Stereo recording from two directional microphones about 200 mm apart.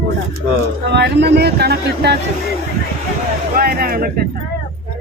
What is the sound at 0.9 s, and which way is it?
Speech, 55° right (ahead or behind).